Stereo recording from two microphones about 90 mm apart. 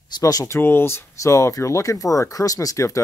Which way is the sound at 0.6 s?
25° left (ahead or behind).